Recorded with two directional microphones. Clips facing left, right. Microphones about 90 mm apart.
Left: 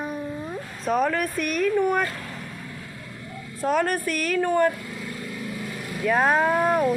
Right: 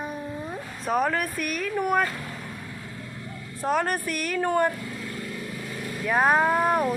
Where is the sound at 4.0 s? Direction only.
15° right (ahead or behind).